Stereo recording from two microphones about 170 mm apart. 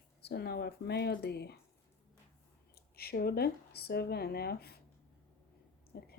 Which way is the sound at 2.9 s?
65° left (ahead or behind).